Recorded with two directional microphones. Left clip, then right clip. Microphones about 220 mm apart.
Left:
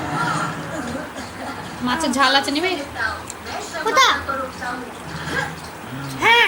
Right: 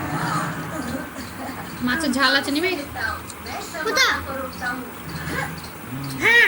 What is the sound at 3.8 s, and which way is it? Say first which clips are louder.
Speech: left 4 dB; 15° right (ahead or behind).